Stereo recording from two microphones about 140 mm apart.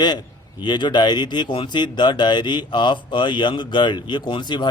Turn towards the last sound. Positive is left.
turn(degrees=35)  # may be behind; listen again after turning